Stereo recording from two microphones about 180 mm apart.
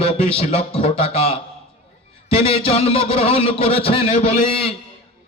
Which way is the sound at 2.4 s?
35° left (ahead or behind).